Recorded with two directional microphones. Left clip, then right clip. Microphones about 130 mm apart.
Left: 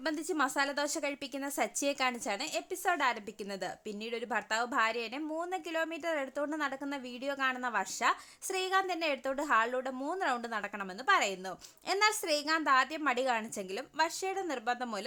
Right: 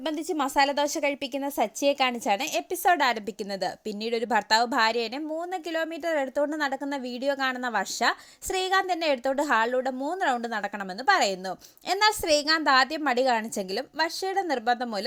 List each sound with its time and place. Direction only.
0.3 s a woman's voice: 25° right (ahead or behind)